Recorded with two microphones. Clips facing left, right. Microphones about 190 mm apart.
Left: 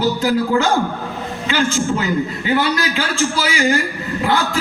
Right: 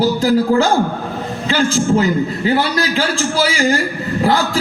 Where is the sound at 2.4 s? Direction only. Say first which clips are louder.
Right 1 dB; 35° right (ahead or behind).